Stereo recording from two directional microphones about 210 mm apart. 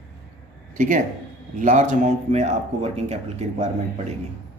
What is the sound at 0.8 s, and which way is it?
A man's voice, 40° right (ahead or behind).